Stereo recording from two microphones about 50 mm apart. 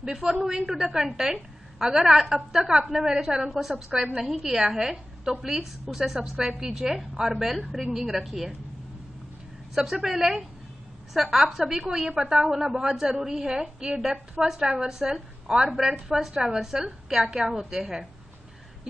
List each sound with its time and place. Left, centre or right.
0.2 s a woman's voice: centre
9.8 s a woman's voice: centre